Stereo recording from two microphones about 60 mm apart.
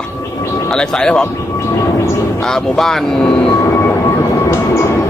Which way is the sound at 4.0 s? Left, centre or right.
Left.